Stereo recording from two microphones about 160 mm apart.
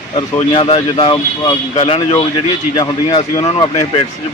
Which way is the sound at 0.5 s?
30° left (ahead or behind).